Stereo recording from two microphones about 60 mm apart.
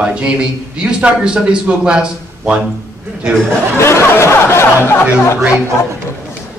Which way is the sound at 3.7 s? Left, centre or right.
Left.